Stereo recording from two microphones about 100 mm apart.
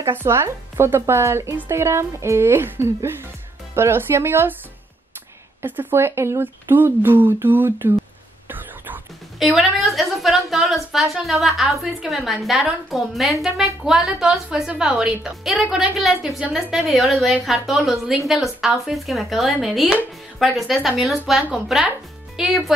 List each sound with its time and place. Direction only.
0.0 s speech: 25° right (ahead or behind)
5.6 s speech: 20° right (ahead or behind)
8.5 s a sound: 20° right (ahead or behind)
9.4 s a woman's voice: centre (ahead or behind)